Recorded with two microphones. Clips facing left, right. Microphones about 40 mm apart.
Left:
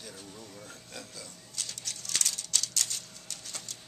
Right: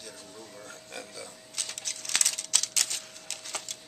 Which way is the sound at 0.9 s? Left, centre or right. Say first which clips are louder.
Right 4 dB; centre.